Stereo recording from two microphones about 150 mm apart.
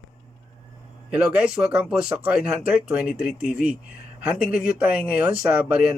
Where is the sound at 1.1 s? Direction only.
5° right (ahead or behind).